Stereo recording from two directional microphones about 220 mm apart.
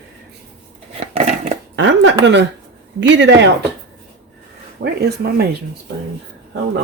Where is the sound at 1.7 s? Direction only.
55° right (ahead or behind).